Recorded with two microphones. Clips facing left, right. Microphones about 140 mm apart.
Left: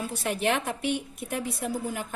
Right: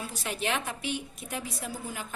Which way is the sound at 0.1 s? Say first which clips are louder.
Left 5 dB; 55° left (ahead or behind).